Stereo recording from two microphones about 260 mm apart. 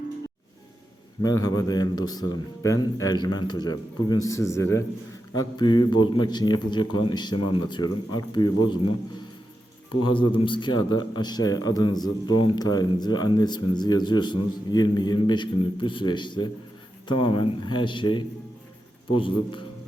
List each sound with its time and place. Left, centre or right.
1.2 s a man's voice: centre
9.9 s a man's voice: centre